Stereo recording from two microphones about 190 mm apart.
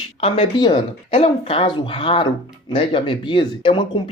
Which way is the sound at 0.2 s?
30° left (ahead or behind).